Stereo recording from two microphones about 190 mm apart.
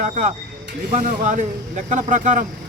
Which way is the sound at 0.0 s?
40° right (ahead or behind).